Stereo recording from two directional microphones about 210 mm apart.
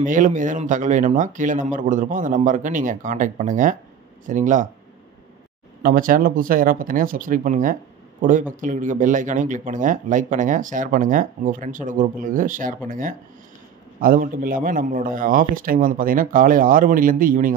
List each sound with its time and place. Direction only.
0.0 s speech: 40° right (ahead or behind)
5.8 s speech: 40° right (ahead or behind)